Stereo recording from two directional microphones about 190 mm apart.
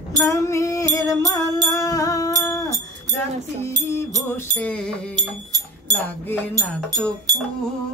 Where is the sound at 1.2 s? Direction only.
15° left (ahead or behind).